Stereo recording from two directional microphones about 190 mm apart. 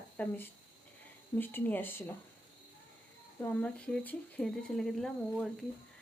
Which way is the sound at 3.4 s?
5° left (ahead or behind).